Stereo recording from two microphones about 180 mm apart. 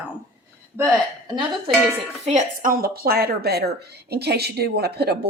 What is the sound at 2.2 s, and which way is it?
A woman's voice, 40° right (ahead or behind).